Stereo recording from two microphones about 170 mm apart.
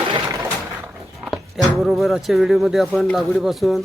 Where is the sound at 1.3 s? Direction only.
Centre (ahead or behind).